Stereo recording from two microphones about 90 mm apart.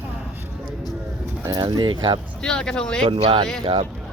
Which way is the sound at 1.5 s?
50° right (ahead or behind).